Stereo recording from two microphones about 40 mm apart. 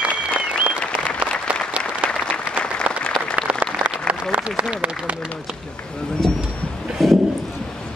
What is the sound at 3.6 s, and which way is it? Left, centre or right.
Applause, right.